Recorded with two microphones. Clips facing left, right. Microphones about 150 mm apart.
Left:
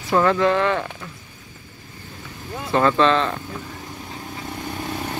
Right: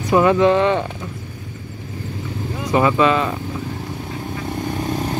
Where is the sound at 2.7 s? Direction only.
10° right (ahead or behind).